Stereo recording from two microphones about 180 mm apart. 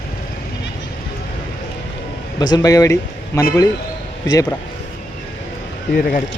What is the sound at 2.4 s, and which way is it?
Speech, 20° left (ahead or behind).